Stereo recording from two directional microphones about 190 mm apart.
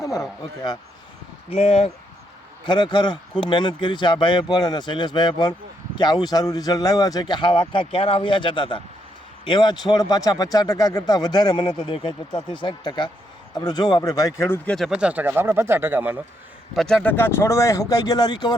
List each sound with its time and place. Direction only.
1.5 s speech: 30° left (ahead or behind); by 16.2 s 10° right (ahead or behind)
16.7 s speech: 5° left (ahead or behind); by 18.5 s 20° left (ahead or behind)